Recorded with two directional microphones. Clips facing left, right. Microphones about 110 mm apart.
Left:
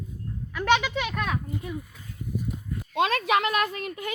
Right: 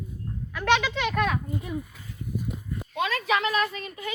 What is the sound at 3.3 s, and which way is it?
Speech, 55° left (ahead or behind).